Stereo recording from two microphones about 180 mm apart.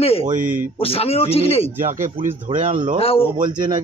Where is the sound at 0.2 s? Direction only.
45° right (ahead or behind).